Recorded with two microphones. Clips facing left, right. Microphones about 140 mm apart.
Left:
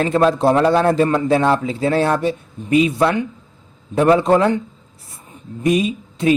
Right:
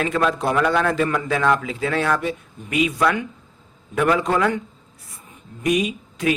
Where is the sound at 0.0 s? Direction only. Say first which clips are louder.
Left 6 dB; 30° left (ahead or behind).